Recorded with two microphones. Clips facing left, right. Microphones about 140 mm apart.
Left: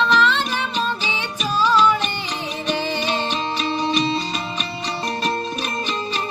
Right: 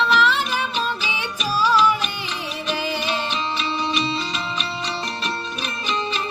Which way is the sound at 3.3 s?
45° left (ahead or behind).